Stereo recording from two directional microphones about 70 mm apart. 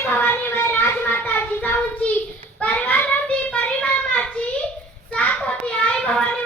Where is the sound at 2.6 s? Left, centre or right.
Left.